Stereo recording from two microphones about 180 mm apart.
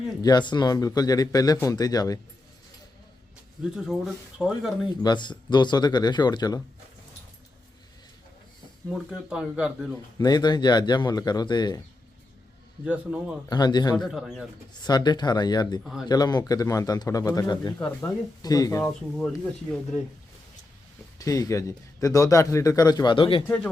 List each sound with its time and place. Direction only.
0.2 s speech: 25° left (ahead or behind)
3.6 s speech: centre (ahead or behind)
5.0 s speech: 25° left (ahead or behind)
8.9 s speech: 5° right (ahead or behind)
10.2 s speech: 20° left (ahead or behind)
12.8 s speech: 5° right (ahead or behind)
13.5 s speech: 25° left (ahead or behind)
13.9 s speech: centre (ahead or behind)
14.7 s speech: 20° left (ahead or behind)
15.8 s speech: centre (ahead or behind)
16.0 s speech: 20° left (ahead or behind)
19.1 s speech: 5° left (ahead or behind)
21.2 s speech: 20° left (ahead or behind)